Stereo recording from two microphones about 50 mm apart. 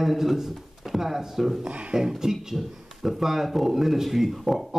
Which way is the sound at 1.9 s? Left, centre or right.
Centre.